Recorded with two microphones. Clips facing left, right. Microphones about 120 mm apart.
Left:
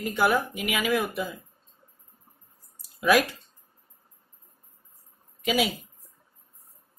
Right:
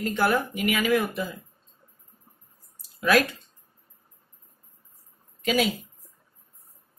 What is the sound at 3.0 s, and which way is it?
Speech, 15° left (ahead or behind).